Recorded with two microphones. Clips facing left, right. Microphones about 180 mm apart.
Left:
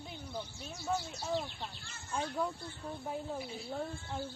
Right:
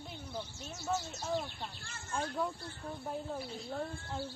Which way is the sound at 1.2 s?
Centre (ahead or behind).